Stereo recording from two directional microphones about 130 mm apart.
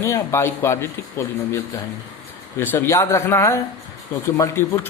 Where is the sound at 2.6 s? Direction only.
15° left (ahead or behind).